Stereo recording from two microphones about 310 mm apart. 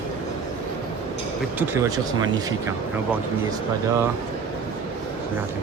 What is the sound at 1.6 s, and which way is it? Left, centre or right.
Speech, centre.